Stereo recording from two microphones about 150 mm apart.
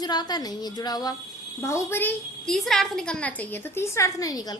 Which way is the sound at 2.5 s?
Centre (ahead or behind).